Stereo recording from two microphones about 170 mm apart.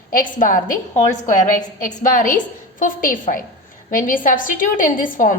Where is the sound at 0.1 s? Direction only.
50° left (ahead or behind).